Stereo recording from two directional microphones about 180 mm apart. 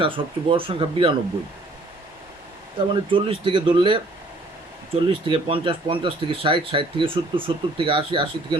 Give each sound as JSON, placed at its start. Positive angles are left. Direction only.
{"t": 0.0, "sound": "speech", "side_deg": -30}
{"t": 2.7, "sound": "speech", "side_deg": -30}
{"t": 5.0, "sound": "speech", "side_deg": -30}